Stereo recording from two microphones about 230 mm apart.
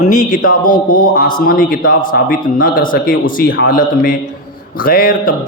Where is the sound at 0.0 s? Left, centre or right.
Left.